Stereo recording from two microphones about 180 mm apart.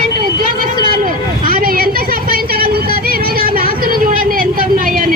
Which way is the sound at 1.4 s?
55° right (ahead or behind).